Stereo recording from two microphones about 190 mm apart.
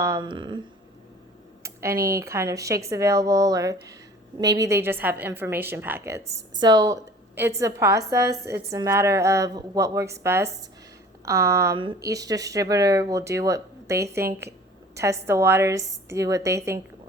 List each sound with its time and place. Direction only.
0.0 s speech: 20° right (ahead or behind)
1.6 s computer keyboard: 15° right (ahead or behind)
2.1 s speech: 15° right (ahead or behind)